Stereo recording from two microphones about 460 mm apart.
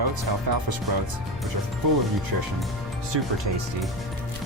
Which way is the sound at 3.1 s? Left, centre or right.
Right.